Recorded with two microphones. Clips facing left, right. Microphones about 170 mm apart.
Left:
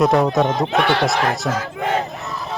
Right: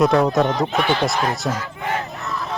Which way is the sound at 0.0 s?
Centre (ahead or behind).